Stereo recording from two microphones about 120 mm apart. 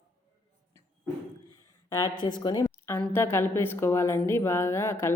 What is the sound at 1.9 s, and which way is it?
Speech, 35° left (ahead or behind).